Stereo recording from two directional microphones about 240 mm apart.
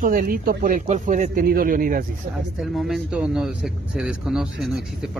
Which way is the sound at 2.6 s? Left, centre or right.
Centre.